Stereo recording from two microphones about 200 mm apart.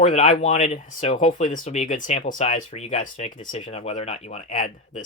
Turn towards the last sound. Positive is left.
turn(degrees=35)  # may be behind; listen again after turning